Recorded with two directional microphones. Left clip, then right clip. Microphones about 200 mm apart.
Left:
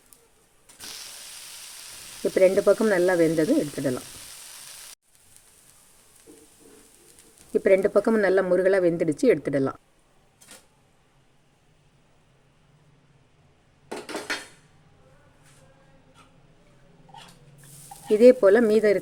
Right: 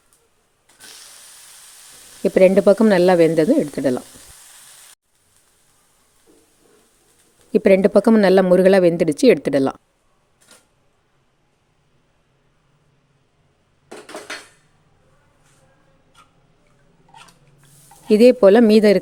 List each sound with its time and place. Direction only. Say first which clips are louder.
2.2 s speech: right 6 dB; 50° right (ahead or behind)
7.5 s speech: right 6 dB; 50° right (ahead or behind)
18.3 s speech: right 7 dB; 45° right (ahead or behind)